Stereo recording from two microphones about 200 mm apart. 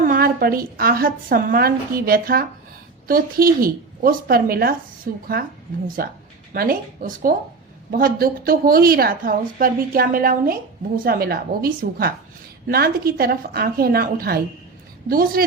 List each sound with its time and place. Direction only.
0.0 s a woman's voice: 45° right (ahead or behind)